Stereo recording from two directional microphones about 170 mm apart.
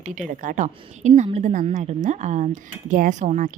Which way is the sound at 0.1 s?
50° right (ahead or behind).